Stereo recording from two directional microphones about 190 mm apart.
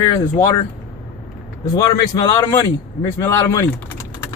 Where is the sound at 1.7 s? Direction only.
15° left (ahead or behind).